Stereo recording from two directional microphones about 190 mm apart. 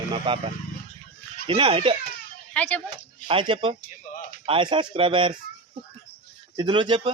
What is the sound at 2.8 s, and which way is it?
Speech, 25° right (ahead or behind).